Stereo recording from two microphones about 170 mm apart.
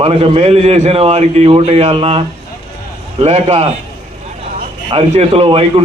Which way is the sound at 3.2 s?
40° right (ahead or behind).